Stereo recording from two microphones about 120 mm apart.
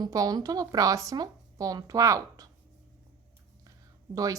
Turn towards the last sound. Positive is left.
turn(degrees=-30)  # may be behind; listen again after turning